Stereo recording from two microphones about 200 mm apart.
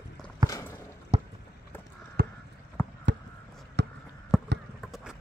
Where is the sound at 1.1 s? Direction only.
30° right (ahead or behind).